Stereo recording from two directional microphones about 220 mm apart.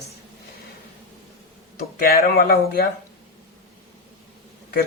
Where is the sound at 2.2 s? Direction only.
40° left (ahead or behind).